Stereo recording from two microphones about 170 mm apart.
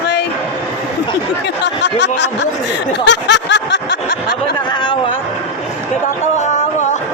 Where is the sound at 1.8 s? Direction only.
90° left.